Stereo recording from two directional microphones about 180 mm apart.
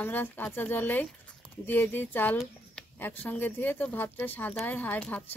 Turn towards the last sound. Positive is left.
turn(degrees=10)  # may be behind; listen again after turning